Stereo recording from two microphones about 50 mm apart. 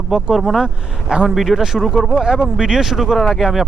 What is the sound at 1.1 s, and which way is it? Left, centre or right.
Speech, centre.